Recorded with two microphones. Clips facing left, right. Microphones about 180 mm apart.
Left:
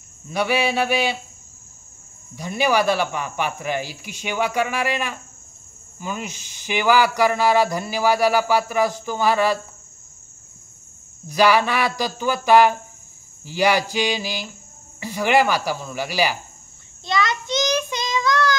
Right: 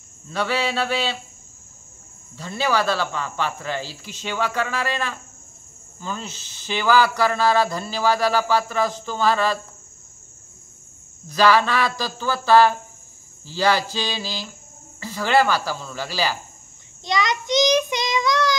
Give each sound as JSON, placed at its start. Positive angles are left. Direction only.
{"t": 0.3, "sound": "speech", "side_deg": 15}
{"t": 2.3, "sound": "speech", "side_deg": 15}
{"t": 11.2, "sound": "speech", "side_deg": 15}
{"t": 17.0, "sound": "child singing", "side_deg": -15}